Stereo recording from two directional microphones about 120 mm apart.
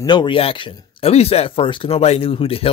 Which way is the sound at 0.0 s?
40° left (ahead or behind).